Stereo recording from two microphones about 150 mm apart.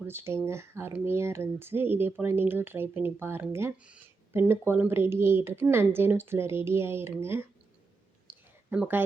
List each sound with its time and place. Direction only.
0.1 s speech: 15° right (ahead or behind)
8.3 s a sound: 5° right (ahead or behind)
8.7 s speech: 10° right (ahead or behind)